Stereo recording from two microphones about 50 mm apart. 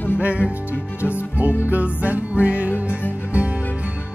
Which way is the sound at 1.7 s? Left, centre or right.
Right.